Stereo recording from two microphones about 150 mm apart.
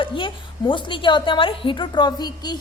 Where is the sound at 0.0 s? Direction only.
35° left (ahead or behind).